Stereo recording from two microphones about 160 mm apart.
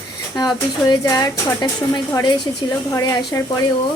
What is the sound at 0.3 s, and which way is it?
Speech, 25° left (ahead or behind).